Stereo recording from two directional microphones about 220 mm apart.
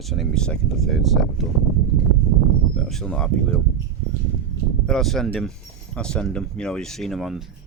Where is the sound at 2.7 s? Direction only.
Centre (ahead or behind).